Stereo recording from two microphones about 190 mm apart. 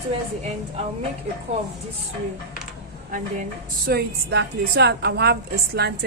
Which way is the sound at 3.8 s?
60° right (ahead or behind).